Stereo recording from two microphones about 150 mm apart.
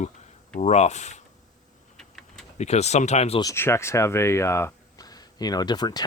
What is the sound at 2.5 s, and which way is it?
Speech, 45° left (ahead or behind).